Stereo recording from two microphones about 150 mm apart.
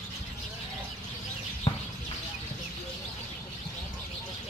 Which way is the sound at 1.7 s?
35° left (ahead or behind).